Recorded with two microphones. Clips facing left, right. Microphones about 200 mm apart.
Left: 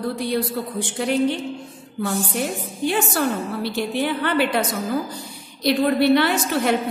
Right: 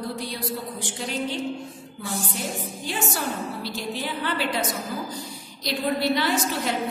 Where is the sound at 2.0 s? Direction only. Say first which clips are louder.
Left 7 dB; 60° left (ahead or behind).